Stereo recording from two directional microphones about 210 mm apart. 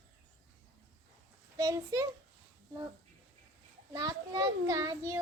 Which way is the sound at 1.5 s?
15° right (ahead or behind).